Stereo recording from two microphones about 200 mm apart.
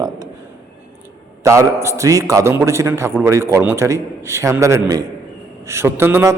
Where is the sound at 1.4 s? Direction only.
15° right (ahead or behind).